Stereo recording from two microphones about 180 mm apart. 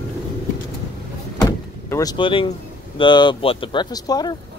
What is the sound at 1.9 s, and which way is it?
Speech, 20° left (ahead or behind).